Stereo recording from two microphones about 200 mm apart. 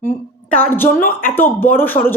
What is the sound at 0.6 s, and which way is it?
A woman's voice, 10° left (ahead or behind).